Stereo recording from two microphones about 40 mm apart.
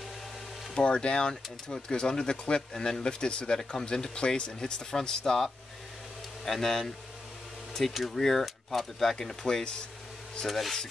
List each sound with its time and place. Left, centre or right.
0.7 s speech: left
6.4 s speech: centre
7.9 s speech: centre
8.2 s speech: centre